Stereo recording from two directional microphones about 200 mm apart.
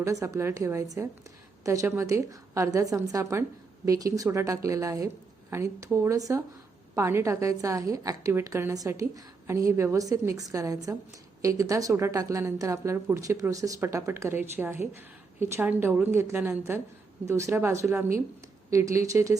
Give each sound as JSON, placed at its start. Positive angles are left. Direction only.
{"t": 0.0, "sound": "a woman's voice", "side_deg": -15}